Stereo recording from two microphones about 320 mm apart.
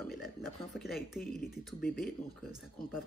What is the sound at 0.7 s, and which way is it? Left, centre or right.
Speech, centre.